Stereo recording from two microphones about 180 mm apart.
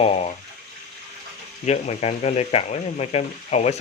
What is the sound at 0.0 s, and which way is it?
Water, 35° left (ahead or behind).